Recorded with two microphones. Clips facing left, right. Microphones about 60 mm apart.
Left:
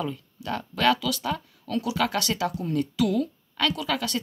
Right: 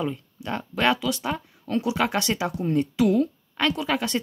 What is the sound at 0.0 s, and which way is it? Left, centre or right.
Speech, right.